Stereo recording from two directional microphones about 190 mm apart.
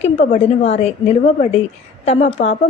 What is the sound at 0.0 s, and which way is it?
A woman's voice, 35° left (ahead or behind).